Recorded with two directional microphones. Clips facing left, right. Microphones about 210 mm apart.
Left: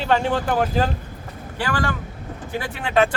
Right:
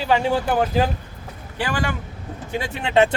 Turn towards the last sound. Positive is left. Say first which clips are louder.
# right 2 dB
turn(degrees=-25)  # may be behind; listen again after turning